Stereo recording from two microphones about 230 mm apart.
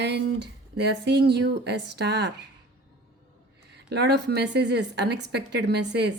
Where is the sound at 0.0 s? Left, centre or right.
Right.